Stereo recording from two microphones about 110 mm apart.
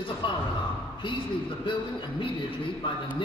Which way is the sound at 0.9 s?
50° left (ahead or behind).